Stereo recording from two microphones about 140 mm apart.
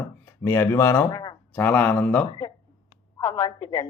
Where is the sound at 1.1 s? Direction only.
30° left (ahead or behind).